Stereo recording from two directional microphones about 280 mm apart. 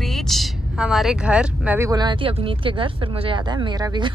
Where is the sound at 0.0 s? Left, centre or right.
Centre.